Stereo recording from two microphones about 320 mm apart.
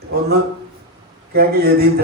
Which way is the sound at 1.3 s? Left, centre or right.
Right.